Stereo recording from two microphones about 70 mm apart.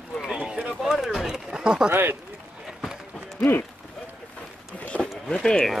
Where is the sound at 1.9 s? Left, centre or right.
Right.